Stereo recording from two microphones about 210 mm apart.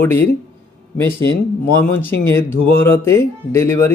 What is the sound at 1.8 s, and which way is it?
Speech, 10° left (ahead or behind).